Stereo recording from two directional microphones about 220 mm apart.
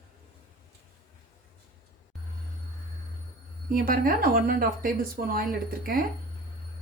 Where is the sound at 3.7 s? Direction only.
40° right (ahead or behind).